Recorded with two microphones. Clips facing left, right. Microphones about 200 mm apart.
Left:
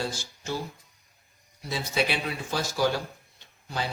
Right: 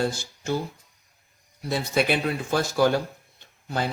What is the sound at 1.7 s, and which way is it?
Speech, 55° right (ahead or behind).